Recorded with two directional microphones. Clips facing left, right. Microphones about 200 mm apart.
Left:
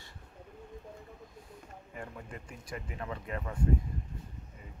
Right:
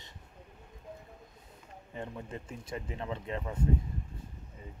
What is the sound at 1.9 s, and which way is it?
Speech, 25° right (ahead or behind).